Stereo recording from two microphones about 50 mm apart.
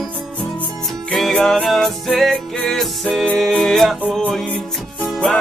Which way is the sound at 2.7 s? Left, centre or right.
Centre.